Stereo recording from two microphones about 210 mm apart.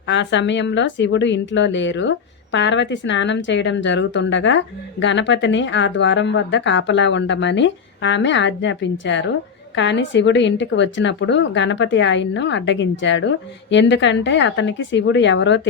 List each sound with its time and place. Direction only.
0.1 s a woman's voice: 60° left (ahead or behind)